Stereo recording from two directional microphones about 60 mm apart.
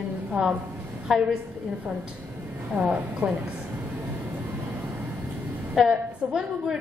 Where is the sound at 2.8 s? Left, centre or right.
Centre.